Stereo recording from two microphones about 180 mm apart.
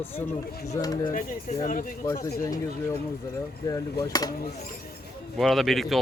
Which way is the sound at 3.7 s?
20° left (ahead or behind).